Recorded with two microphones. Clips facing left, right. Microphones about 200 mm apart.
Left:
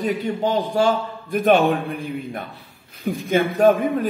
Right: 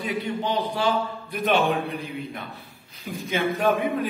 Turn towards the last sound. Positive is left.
turn(degrees=45)  # may be behind; listen again after turning